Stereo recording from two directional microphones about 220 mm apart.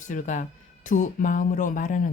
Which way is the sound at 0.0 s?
35° left (ahead or behind).